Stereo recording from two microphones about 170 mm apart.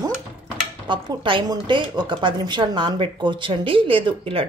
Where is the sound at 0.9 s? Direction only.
30° right (ahead or behind).